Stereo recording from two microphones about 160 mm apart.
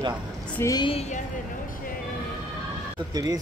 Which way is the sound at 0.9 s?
40° left (ahead or behind).